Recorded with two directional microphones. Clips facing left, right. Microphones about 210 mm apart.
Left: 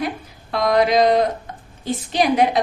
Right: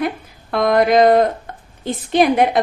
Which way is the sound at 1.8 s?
55° right (ahead or behind).